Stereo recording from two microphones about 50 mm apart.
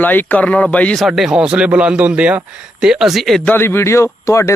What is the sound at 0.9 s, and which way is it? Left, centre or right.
Speech, centre.